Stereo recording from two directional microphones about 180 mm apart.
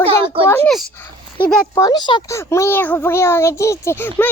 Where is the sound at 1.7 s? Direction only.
20° left (ahead or behind).